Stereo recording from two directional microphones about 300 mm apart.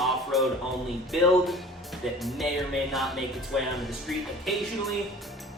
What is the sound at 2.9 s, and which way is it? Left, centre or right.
Speech, centre.